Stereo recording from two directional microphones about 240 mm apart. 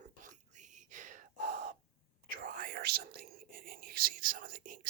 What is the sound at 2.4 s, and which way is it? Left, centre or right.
Whispering, right.